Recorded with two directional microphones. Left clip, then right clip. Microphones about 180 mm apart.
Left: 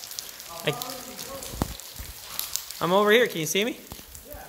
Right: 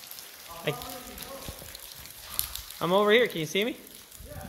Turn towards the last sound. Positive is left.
turn(degrees=-5)  # may be behind; listen again after turning